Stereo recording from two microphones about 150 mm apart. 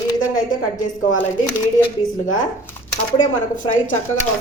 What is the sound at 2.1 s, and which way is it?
Speech, 60° left (ahead or behind).